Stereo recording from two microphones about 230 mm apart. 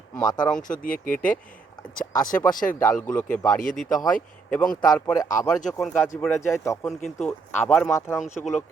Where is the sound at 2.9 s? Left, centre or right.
Centre.